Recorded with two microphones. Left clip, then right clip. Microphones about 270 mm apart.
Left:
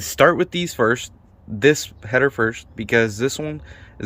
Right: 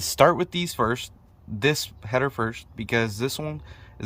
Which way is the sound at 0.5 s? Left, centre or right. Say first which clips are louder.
Left 6 dB; centre.